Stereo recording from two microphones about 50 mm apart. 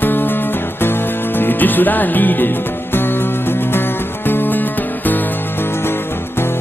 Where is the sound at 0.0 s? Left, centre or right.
Left.